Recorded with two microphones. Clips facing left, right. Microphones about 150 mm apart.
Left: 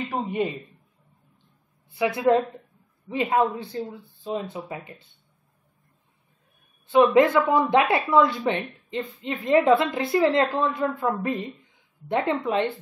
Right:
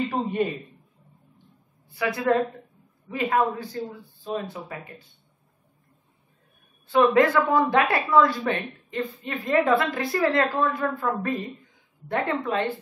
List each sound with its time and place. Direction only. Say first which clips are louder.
0.1 s a man's voice: right 1 dB; 15° left (ahead or behind)
1.9 s a woman's voice: left 3 dB; 20° left (ahead or behind)
6.9 s a woman's voice: left 2 dB; 20° left (ahead or behind)